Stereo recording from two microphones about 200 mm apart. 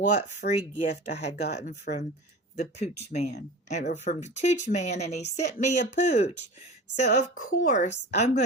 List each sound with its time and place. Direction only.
0.1 s a woman's voice: 35° left (ahead or behind)